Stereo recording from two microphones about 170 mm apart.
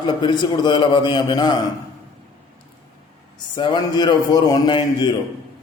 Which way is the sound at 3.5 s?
25° left (ahead or behind).